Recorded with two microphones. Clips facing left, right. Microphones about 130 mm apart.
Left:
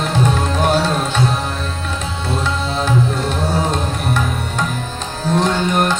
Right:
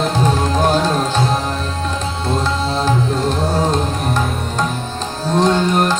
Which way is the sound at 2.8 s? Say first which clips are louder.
Even; 35° right (ahead or behind).